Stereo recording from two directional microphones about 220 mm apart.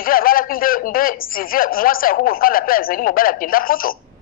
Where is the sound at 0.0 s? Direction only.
40° left (ahead or behind).